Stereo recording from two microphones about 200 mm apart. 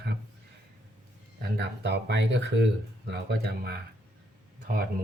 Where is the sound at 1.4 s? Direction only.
60° right (ahead or behind).